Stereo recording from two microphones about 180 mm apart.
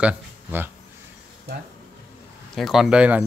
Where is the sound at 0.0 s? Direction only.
10° right (ahead or behind).